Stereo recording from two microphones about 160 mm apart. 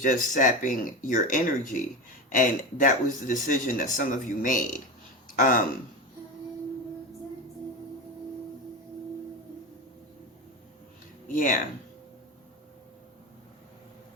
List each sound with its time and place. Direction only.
0.0 s speech: 55° left (ahead or behind)
11.3 s speech: 55° left (ahead or behind)